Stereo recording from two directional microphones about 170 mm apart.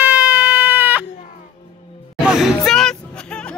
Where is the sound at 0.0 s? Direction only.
10° right (ahead or behind).